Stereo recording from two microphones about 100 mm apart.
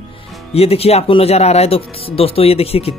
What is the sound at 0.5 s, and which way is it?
Speech, 80° left.